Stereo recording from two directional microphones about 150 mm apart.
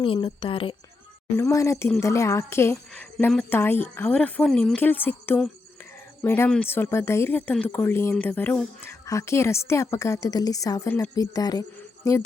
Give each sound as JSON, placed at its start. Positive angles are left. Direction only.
{"t": 0.0, "sound": "a woman's voice", "side_deg": 35}
{"t": 1.4, "sound": "a woman's voice", "side_deg": 20}